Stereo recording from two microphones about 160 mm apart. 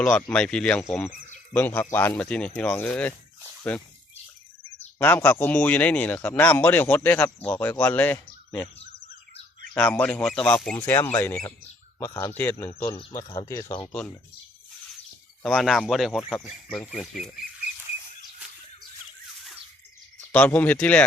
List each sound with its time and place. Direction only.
0.0 s a man's voice: 5° left (ahead or behind)
4.9 s speech: 15° left (ahead or behind)
9.7 s speech: 10° left (ahead or behind)
13.3 s speech: 25° left (ahead or behind)
15.4 s a man's voice: centre (ahead or behind)
20.3 s speech: 10° left (ahead or behind)